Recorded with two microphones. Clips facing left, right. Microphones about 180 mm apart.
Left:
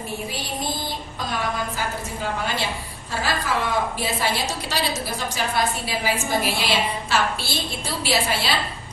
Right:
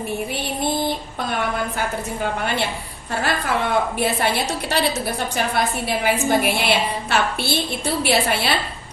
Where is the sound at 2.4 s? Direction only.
60° right (ahead or behind).